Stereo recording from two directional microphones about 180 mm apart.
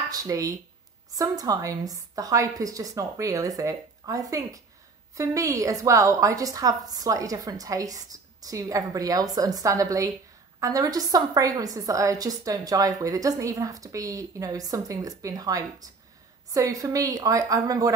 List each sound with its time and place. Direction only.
0.1 s a woman's voice: 20° right (ahead or behind)